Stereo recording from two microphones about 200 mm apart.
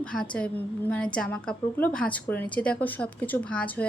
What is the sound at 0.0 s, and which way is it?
A woman's voice, 5° left (ahead or behind).